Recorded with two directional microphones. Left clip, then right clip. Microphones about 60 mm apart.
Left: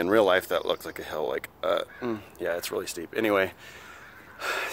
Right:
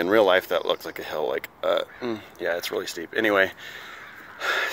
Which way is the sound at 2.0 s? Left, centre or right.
Left.